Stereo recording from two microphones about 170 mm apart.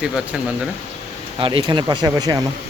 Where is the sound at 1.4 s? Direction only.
30° right (ahead or behind).